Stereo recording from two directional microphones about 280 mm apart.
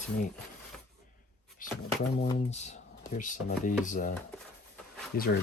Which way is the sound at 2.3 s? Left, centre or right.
Left.